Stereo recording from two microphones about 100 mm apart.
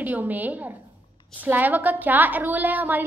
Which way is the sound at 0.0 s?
20° right (ahead or behind).